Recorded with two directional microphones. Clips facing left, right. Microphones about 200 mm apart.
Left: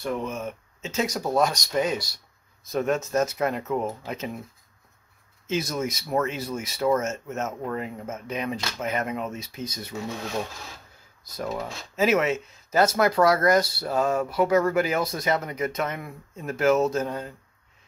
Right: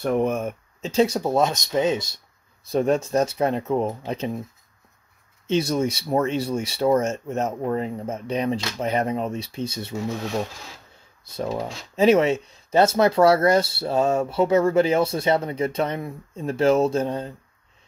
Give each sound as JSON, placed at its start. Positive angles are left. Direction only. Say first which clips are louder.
{"t": 0.0, "sound": "speech", "louder": "right 7 dB", "side_deg": -55}
{"t": 0.8, "sound": "speech", "louder": "right 7 dB", "side_deg": -30}
{"t": 5.5, "sound": "speech", "louder": "right 6 dB", "side_deg": -30}
{"t": 11.2, "sound": "speech", "louder": "right 4 dB", "side_deg": -30}